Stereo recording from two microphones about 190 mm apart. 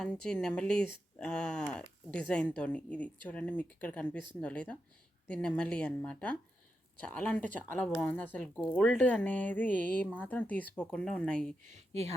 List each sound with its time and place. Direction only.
0.0 s speech: 5° left (ahead or behind)
11.7 s speech: 35° right (ahead or behind)